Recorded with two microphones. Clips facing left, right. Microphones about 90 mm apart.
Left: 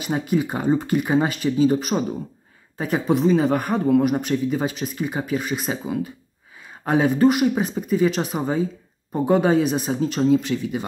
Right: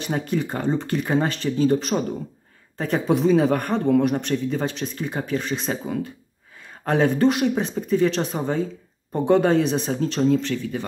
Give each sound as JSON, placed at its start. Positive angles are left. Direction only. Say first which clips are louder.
{"t": 0.0, "sound": "a man's voice", "louder": "left 2 dB", "side_deg": 10}